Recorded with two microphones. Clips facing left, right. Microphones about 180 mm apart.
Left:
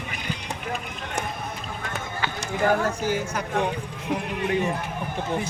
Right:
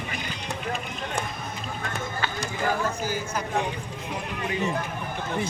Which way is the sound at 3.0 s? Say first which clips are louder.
Left 3 dB; 70° left (ahead or behind).